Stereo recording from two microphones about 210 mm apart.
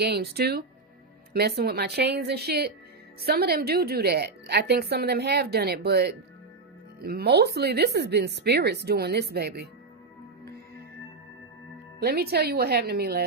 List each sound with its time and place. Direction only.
0.0 s a woman's voice: 50° right (ahead or behind)
11.9 s a woman's voice: 50° right (ahead or behind)